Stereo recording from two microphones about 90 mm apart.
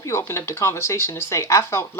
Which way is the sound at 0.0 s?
30° left (ahead or behind).